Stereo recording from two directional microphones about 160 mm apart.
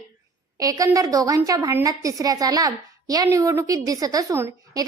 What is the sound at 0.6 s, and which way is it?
A woman's voice, 20° right (ahead or behind).